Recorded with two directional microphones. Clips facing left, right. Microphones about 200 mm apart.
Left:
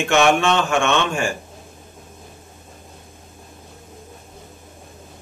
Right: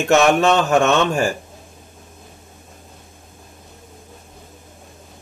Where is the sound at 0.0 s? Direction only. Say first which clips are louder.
Right 2 dB; 40° right (ahead or behind).